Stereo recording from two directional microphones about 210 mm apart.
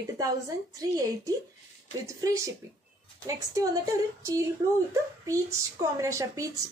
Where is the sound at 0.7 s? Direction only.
15° right (ahead or behind).